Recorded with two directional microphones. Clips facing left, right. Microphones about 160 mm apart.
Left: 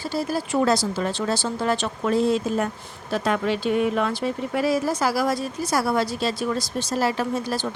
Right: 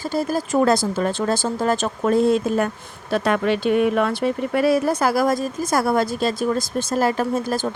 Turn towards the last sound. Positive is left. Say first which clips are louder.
# right 3 dB
turn(degrees=-45)  # may be behind; listen again after turning